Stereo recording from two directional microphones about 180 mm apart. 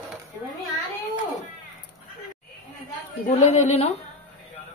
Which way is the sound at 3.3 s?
35° left (ahead or behind).